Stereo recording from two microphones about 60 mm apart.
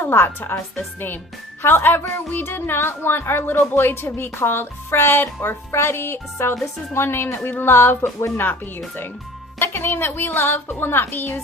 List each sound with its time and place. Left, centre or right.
0.0 s a woman's voice: left